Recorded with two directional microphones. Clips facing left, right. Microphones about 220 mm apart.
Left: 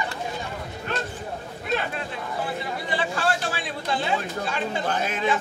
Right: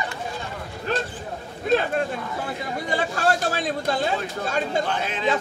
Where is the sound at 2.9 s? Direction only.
45° right (ahead or behind).